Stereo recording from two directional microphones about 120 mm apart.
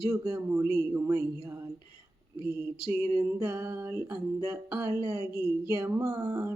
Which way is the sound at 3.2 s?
25° right (ahead or behind).